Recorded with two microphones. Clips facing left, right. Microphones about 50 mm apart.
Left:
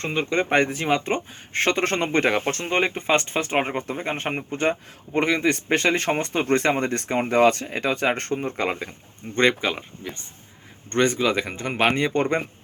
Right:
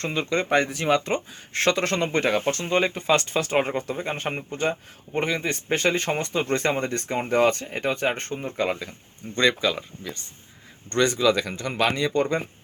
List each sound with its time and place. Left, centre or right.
0.0 s speech: left